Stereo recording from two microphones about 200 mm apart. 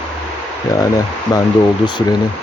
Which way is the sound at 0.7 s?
20° left (ahead or behind).